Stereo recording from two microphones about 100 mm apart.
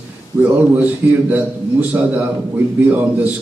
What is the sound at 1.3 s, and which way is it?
Speech, 15° right (ahead or behind).